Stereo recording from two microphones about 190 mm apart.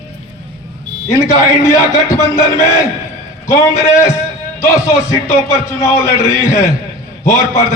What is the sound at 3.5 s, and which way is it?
A man's voice, 15° left (ahead or behind).